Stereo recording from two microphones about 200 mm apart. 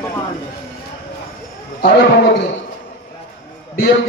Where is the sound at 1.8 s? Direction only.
55° left (ahead or behind).